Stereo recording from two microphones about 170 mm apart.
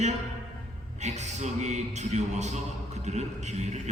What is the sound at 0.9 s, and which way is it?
A man's voice, 45° right (ahead or behind).